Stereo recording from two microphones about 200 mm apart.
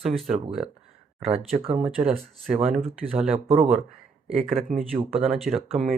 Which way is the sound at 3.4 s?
30° right (ahead or behind).